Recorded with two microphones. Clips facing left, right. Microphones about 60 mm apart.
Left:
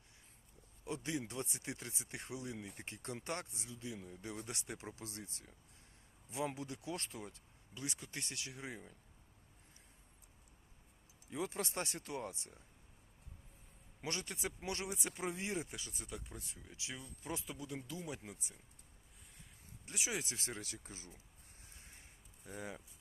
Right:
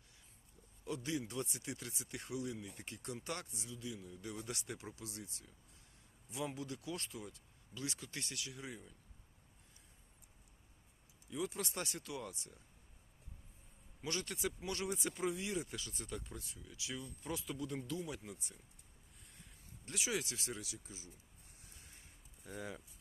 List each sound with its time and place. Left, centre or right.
0.9 s speech: left
4.9 s speech: left
11.3 s speech: left
14.0 s speech: left
15.9 s speech: centre
16.6 s speech: left
17.7 s speech: centre
17.9 s speech: left
19.8 s speech: left
21.6 s a sound: left
22.4 s speech: centre